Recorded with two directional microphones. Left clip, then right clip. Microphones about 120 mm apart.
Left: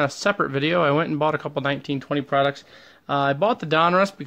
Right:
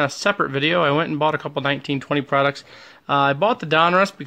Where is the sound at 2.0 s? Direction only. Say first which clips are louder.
Right 1 dB; 25° right (ahead or behind).